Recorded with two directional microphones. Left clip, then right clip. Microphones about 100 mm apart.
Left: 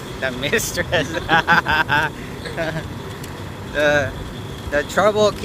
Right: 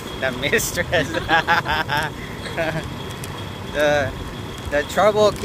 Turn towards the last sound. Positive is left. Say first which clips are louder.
# even
turn(degrees=0)  # may be behind; listen again after turning